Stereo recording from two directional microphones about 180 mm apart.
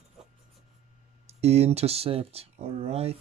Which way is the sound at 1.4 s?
35° right (ahead or behind).